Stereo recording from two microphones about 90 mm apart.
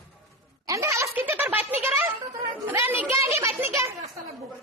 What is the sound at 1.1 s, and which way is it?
A woman's voice, 20° right (ahead or behind).